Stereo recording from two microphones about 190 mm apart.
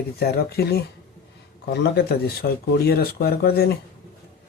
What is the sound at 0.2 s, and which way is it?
Speech, 55° left (ahead or behind).